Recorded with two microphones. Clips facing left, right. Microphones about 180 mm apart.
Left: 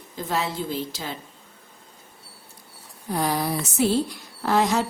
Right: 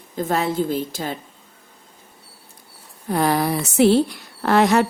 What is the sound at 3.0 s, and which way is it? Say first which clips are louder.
Speech: right 5 dB; 65° right (ahead or behind).